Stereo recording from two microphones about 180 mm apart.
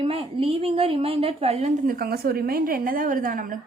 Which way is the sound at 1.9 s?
55° right (ahead or behind).